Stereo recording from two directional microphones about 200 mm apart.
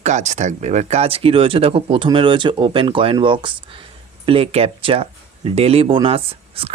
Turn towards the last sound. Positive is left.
turn(degrees=-30)  # may be behind; listen again after turning